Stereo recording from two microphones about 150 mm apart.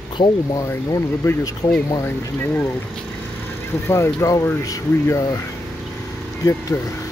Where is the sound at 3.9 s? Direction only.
20° left (ahead or behind).